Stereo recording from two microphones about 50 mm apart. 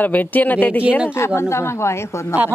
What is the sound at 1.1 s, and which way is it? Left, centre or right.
Speech, left.